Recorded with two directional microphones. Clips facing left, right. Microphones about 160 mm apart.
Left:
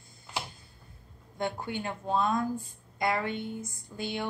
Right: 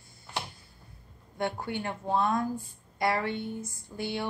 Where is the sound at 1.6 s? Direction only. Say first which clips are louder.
Right 1 dB; 20° left (ahead or behind).